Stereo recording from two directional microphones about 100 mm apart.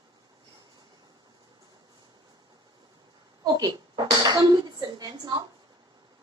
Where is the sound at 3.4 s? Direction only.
45° right (ahead or behind).